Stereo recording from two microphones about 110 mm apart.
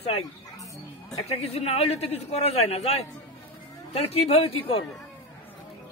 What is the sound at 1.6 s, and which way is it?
Speech, 65° left (ahead or behind).